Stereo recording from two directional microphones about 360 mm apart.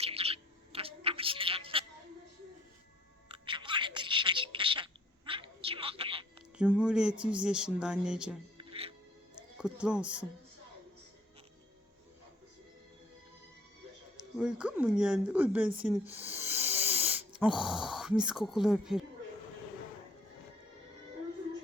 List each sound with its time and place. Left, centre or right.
0.0 s bird: centre
3.2 s a sound: centre
6.6 s speech: centre
8.5 s music: centre
9.6 s speech: centre
14.2 s speech: centre